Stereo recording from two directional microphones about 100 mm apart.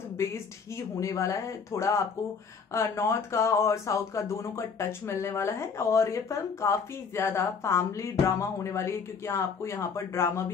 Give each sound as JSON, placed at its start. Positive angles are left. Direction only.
{"t": 0.9, "sound": "speech", "side_deg": 30}